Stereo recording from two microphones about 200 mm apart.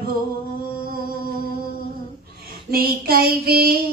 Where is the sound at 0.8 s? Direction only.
45° right (ahead or behind).